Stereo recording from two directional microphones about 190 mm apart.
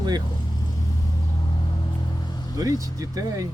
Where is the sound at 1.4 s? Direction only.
25° left (ahead or behind).